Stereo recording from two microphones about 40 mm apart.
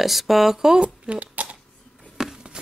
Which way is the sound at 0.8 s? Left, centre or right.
Right.